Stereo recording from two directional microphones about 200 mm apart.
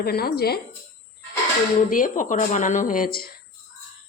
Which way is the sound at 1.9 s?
40° left (ahead or behind).